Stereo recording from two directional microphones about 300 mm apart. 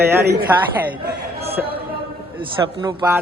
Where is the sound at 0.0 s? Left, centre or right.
Centre.